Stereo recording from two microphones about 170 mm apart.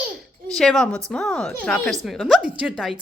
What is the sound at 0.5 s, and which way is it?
Speech, 5° left (ahead or behind).